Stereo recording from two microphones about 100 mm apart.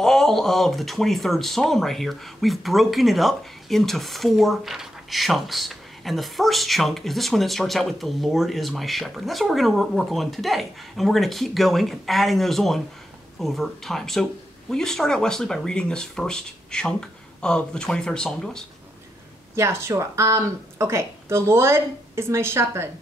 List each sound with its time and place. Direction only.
0.0 s speech: 5° left (ahead or behind)
19.5 s a woman's voice: 30° right (ahead or behind)